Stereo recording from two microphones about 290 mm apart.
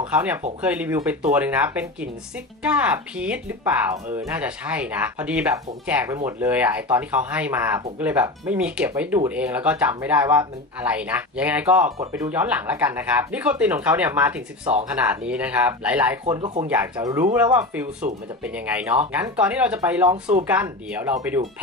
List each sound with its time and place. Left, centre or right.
0.0 s speech: centre
18.0 s speech: right
18.4 s speech: centre